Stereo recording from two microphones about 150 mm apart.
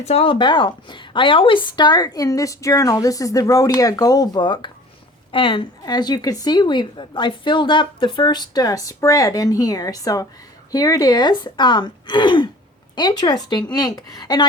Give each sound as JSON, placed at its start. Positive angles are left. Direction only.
{"t": 0.0, "sound": "a woman's voice", "side_deg": 45}